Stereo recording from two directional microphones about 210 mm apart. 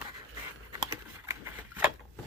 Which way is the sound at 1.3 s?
15° right (ahead or behind).